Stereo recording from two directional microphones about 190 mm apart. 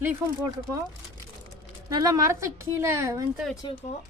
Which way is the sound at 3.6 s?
25° left (ahead or behind).